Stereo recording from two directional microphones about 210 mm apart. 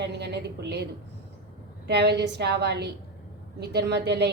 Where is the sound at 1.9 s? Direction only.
55° right (ahead or behind).